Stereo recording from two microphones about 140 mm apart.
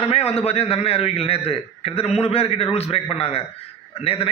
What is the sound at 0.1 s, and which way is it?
A man's voice, 45° left (ahead or behind).